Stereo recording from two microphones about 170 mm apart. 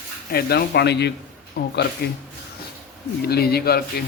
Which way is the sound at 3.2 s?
70° left (ahead or behind).